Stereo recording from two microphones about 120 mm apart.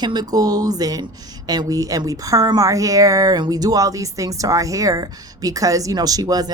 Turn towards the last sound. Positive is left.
turn(degrees=-35)  # may be behind; listen again after turning